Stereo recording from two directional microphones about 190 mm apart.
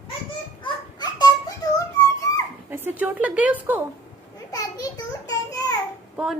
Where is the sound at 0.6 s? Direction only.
20° left (ahead or behind).